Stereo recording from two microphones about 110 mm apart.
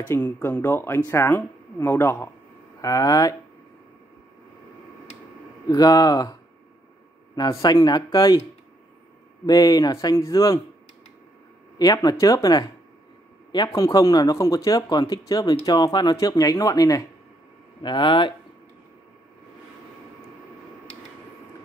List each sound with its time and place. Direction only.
0.1 s speech: 20° left (ahead or behind)
2.8 s speech: 30° left (ahead or behind)
5.7 s speech: 35° left (ahead or behind)
7.3 s speech: 40° left (ahead or behind)
9.5 s speech: 35° left (ahead or behind)
11.8 s speech: 35° left (ahead or behind)
13.7 s speech: 35° left (ahead or behind)
17.8 s speech: 45° left (ahead or behind)